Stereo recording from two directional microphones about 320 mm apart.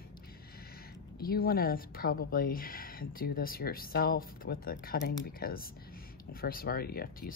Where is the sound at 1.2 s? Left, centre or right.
Left.